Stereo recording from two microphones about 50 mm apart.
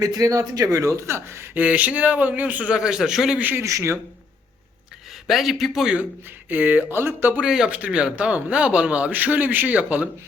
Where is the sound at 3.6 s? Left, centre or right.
Right.